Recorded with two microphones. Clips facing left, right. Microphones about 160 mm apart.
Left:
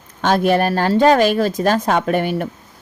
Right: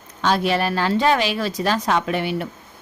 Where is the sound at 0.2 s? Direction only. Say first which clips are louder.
Left 5 dB; 50° left (ahead or behind).